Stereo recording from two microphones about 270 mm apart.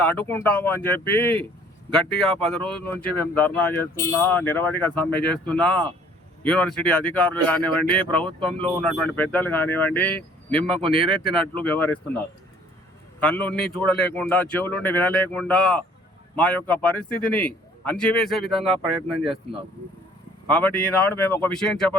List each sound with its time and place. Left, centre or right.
0.0 s speech: centre
10.8 s speech: centre
11.2 s speech: centre
13.1 s a man's voice: centre
20.6 s speech: centre